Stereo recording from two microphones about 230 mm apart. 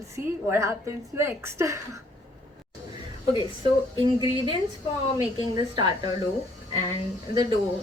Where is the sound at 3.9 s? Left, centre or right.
Centre.